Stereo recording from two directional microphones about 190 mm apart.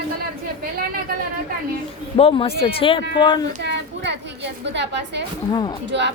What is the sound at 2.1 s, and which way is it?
A man's voice, 30° left (ahead or behind).